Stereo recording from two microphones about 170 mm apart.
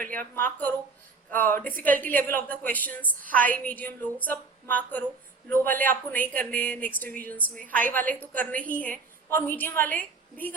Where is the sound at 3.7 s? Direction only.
10° left (ahead or behind).